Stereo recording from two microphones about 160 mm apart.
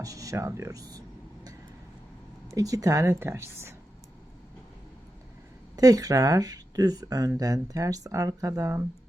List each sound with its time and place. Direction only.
0.0 s speech: 20° right (ahead or behind)
2.5 s speech: 20° right (ahead or behind)
5.7 s speech: 20° right (ahead or behind)